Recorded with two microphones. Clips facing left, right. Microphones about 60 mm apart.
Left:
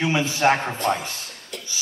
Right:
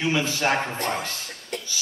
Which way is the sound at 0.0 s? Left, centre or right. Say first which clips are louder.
Left 3 dB; left.